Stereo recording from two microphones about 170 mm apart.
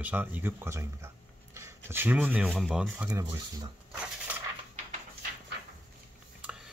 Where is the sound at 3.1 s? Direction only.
20° right (ahead or behind).